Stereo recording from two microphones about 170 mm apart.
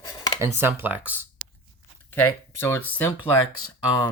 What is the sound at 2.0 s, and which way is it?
Speech, 10° left (ahead or behind).